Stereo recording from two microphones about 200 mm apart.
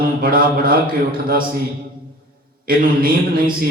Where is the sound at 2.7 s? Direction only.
45° right (ahead or behind).